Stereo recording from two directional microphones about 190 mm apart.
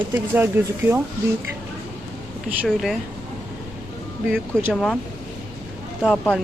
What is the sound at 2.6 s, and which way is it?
Speech, centre (ahead or behind).